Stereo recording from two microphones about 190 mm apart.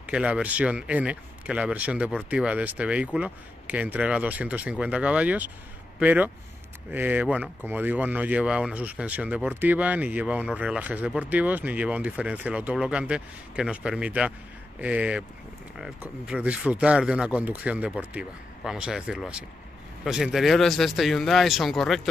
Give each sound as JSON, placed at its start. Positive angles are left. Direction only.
{"t": 0.0, "sound": "speech", "side_deg": -5}